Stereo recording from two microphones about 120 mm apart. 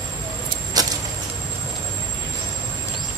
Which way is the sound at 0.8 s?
30° right (ahead or behind).